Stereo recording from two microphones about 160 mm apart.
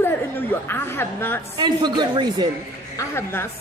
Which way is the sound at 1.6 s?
25° right (ahead or behind).